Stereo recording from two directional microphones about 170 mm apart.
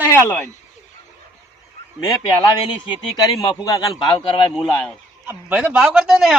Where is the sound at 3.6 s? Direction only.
20° left (ahead or behind).